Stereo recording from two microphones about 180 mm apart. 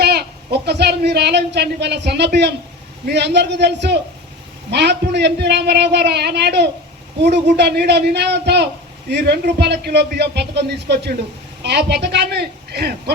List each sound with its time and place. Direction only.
0.0 s a man's voice: 65° right (ahead or behind)